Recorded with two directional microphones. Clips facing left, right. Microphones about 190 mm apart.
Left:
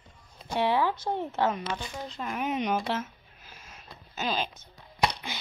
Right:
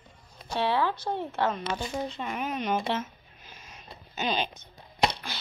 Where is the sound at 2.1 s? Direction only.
Centre (ahead or behind).